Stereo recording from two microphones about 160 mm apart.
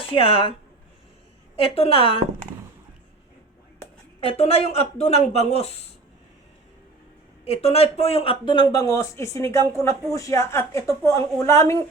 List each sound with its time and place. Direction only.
0.0 s speech: 35° left (ahead or behind)
1.5 s speech: 35° left (ahead or behind)
4.2 s speech: 35° left (ahead or behind)
7.4 s speech: 40° left (ahead or behind); by 11.8 s 20° left (ahead or behind)